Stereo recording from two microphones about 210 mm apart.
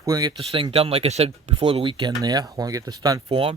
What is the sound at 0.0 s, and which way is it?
Speech, 20° right (ahead or behind).